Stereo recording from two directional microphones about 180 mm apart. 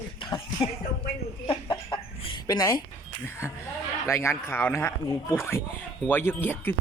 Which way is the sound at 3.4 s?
15° left (ahead or behind).